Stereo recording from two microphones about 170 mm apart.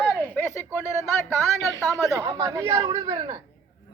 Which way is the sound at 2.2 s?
20° right (ahead or behind).